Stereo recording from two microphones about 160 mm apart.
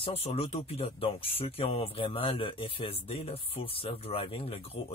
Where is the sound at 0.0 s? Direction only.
40° left (ahead or behind).